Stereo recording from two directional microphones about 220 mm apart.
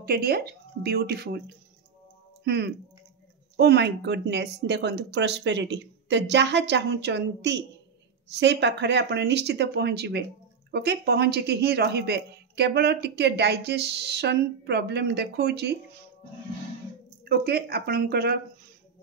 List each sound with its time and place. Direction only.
0.0 s speech: 45° right (ahead or behind)
2.4 s speech: 45° right (ahead or behind)
17.2 s speech: 45° right (ahead or behind)